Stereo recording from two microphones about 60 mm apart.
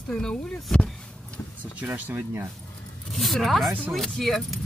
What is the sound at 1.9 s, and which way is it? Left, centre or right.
Speech, right.